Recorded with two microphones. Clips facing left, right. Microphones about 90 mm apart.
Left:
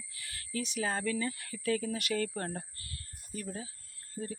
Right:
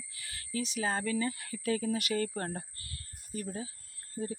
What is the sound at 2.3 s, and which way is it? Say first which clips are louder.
Speech: right 1 dB; 15° right (ahead or behind).